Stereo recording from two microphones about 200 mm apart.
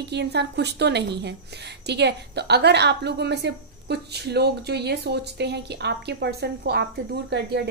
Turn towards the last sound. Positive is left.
turn(degrees=-55)  # may be behind; listen again after turning